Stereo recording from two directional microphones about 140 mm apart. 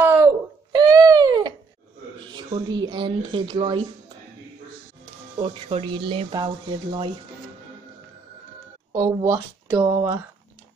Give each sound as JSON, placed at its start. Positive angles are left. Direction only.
{"t": 0.0, "sound": "a sound", "side_deg": -20}
{"t": 2.3, "sound": "speech", "side_deg": -30}
{"t": 5.4, "sound": "speech", "side_deg": -40}
{"t": 8.9, "sound": "speech", "side_deg": -25}